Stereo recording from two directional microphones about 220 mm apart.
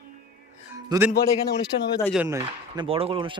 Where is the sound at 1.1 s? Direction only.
45° left (ahead or behind).